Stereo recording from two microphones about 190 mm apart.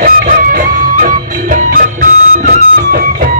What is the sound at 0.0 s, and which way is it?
Music, 50° right (ahead or behind).